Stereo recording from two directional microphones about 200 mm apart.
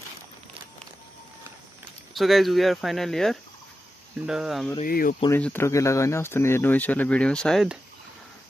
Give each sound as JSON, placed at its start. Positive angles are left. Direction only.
{"t": 2.1, "sound": "speech", "side_deg": 0}
{"t": 4.8, "sound": "speech", "side_deg": 45}
{"t": 5.3, "sound": "speech", "side_deg": 10}